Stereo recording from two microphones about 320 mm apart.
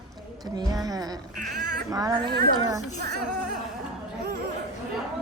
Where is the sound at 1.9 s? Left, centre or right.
Centre.